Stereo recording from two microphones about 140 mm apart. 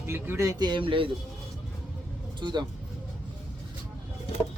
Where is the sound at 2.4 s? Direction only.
30° right (ahead or behind).